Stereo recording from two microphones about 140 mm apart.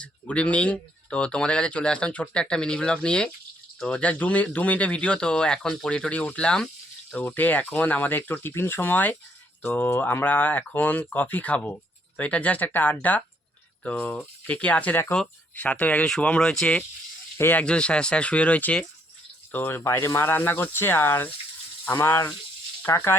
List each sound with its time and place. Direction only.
0.0 s speech: 10° left (ahead or behind)